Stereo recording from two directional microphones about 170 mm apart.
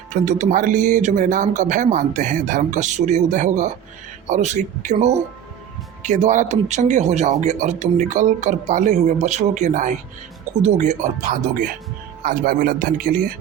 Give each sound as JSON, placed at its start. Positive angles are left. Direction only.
{"t": 0.1, "sound": "speech", "side_deg": -45}